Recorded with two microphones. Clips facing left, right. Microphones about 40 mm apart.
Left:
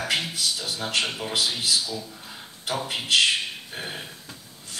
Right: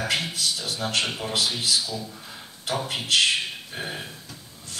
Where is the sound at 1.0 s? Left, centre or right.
Centre.